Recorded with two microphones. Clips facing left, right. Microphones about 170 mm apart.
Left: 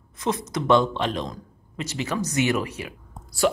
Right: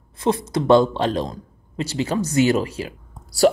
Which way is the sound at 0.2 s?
30° right (ahead or behind).